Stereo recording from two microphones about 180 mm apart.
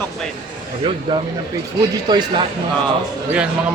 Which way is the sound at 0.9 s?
30° right (ahead or behind).